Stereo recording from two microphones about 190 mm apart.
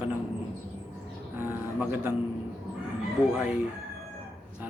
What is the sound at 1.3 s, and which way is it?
Speech, 10° right (ahead or behind).